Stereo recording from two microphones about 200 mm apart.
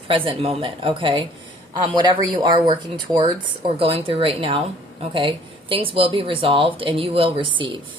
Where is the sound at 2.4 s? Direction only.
20° right (ahead or behind).